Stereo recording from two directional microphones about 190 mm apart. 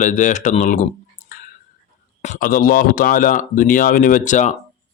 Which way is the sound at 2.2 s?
45° left (ahead or behind).